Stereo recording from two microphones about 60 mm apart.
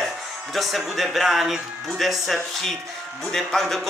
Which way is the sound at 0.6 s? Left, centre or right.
Centre.